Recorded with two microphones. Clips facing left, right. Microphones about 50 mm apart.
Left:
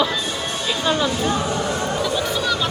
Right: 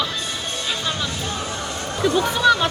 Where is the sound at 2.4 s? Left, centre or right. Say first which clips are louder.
Right 6 dB; right.